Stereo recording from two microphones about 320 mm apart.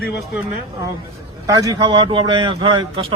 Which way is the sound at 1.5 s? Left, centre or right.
Centre.